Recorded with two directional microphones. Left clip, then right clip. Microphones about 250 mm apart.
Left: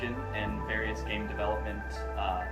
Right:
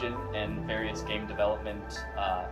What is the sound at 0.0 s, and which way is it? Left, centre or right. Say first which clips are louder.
Music: right 1 dB; centre.